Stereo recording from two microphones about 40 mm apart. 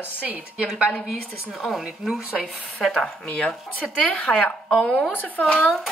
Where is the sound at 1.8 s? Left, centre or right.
Centre.